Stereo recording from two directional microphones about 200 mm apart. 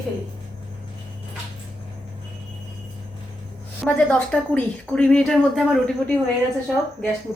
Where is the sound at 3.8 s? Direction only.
5° left (ahead or behind).